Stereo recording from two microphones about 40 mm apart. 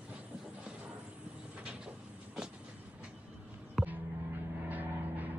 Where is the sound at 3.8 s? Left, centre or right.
Centre.